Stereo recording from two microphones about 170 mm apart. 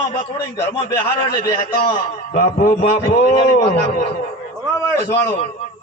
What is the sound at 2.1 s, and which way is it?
Speech, 50° left (ahead or behind).